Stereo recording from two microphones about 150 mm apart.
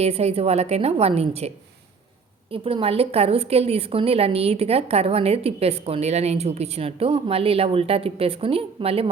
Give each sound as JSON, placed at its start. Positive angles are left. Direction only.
{"t": 0.0, "sound": "a woman's voice", "side_deg": -45}